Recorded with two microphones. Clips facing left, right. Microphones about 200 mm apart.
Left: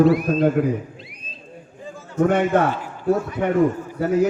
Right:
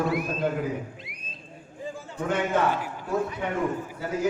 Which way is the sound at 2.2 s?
60° left (ahead or behind).